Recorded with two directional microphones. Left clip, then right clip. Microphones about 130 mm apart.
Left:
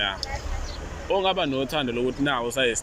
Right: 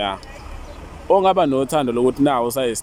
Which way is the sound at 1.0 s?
50° right (ahead or behind).